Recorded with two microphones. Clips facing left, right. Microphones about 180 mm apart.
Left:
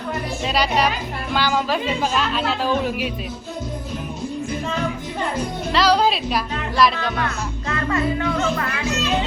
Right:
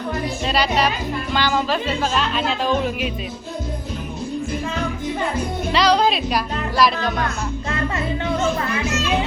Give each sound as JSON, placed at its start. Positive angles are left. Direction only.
{"t": 0.4, "sound": "speech", "side_deg": 10}
{"t": 5.7, "sound": "speech", "side_deg": 5}
{"t": 7.9, "sound": "speech", "side_deg": -25}